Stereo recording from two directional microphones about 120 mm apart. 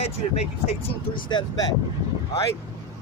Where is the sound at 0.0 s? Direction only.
60° left (ahead or behind).